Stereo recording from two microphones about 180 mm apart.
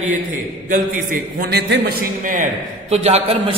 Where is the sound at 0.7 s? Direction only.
50° right (ahead or behind).